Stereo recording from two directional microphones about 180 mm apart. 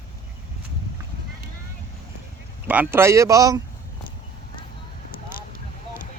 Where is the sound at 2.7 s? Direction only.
10° right (ahead or behind).